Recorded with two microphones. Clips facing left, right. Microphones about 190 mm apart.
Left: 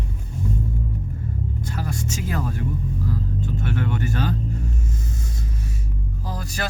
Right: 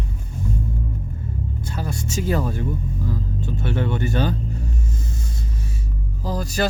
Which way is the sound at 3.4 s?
30° right (ahead or behind).